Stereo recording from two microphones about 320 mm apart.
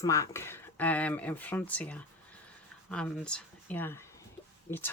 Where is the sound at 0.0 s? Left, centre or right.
Centre.